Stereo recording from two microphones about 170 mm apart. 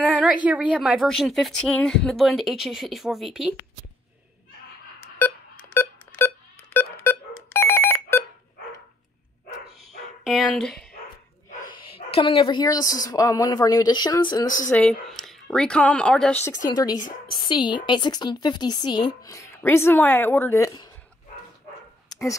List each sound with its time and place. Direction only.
0.0 s a sound: 10° right (ahead or behind)
0.5 s speech: 5° right (ahead or behind)
5.0 s beep: 10° left (ahead or behind)
10.2 s speech: centre (ahead or behind)
11.8 s a woman's voice: 30° left (ahead or behind)
14.7 s speech: 5° left (ahead or behind)
16.6 s a woman's voice: 20° left (ahead or behind)